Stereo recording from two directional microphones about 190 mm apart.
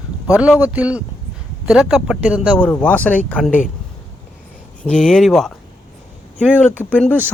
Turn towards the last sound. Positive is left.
turn(degrees=5)  # may be behind; listen again after turning